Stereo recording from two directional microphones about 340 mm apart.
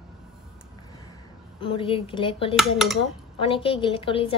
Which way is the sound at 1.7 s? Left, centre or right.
Centre.